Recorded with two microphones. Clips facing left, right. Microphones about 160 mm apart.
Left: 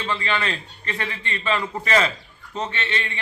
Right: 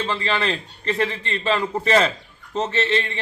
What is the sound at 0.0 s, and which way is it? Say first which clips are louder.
A man's voice: right 2 dB; 35° right (ahead or behind).